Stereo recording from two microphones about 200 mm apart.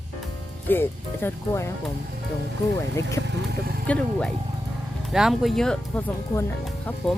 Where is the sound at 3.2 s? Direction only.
50° right (ahead or behind).